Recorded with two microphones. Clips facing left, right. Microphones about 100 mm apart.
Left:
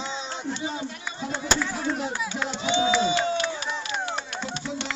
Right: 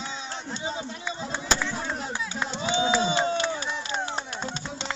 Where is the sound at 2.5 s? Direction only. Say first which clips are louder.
Left 1 dB; 35° right (ahead or behind).